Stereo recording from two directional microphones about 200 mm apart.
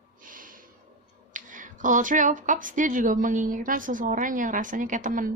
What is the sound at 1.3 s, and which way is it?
Speech, 40° right (ahead or behind).